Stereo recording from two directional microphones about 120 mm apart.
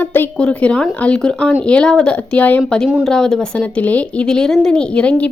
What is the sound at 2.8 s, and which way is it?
Speech, 5° right (ahead or behind).